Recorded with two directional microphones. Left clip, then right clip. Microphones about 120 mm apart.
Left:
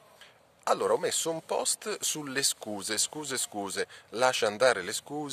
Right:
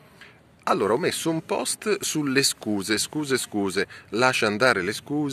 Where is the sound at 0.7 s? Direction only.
40° left (ahead or behind).